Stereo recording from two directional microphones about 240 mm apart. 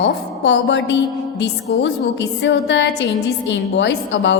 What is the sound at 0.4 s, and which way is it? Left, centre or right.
A woman's voice, left.